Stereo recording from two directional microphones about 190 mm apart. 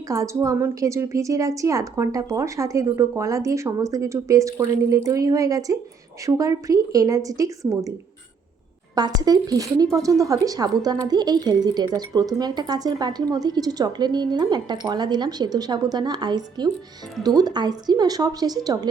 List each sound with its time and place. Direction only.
0.1 s a woman's voice: 15° right (ahead or behind)
9.0 s a woman's voice: 20° right (ahead or behind)